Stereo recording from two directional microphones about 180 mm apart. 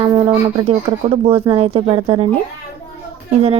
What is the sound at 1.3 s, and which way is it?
Speech, 30° right (ahead or behind).